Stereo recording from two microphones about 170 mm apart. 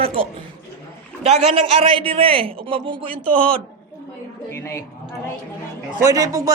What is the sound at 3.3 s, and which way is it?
A man's voice, 5° left (ahead or behind).